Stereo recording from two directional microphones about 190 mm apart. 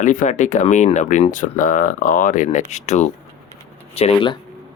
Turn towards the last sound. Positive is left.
turn(degrees=25)  # may be behind; listen again after turning